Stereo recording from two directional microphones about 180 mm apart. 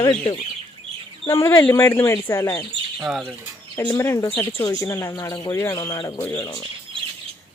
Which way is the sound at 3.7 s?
20° left (ahead or behind).